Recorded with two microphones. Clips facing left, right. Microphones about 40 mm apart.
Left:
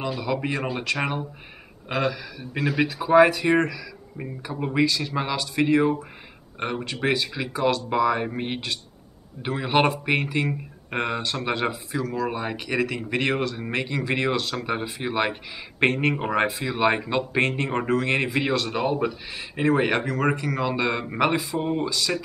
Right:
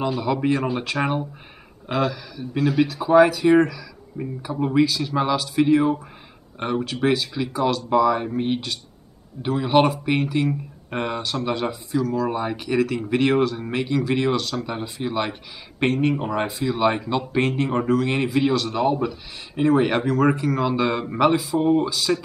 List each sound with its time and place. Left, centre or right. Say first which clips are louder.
0.0 s speech: right 4 dB; centre
1.9 s speech: right 2 dB; centre
11.3 s speech: right 1 dB; centre
16.2 s speech: left 1 dB; left
16.4 s speech: right 1 dB; centre